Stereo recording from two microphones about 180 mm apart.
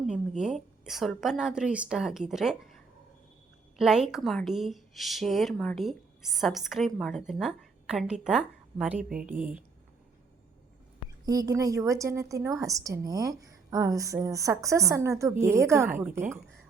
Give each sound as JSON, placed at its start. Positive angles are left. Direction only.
{"t": 0.1, "sound": "a woman's voice", "side_deg": -5}
{"t": 3.8, "sound": "speech", "side_deg": -5}
{"t": 11.3, "sound": "a woman's voice", "side_deg": -20}